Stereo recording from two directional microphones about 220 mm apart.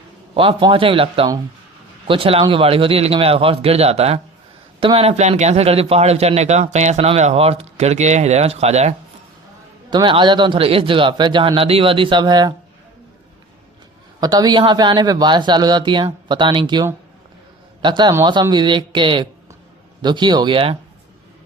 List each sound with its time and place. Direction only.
0.3 s a man's voice: 25° right (ahead or behind)
14.2 s a man's voice: 15° right (ahead or behind)